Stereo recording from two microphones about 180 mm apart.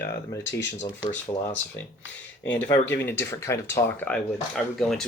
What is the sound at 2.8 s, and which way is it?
Speech, 10° left (ahead or behind).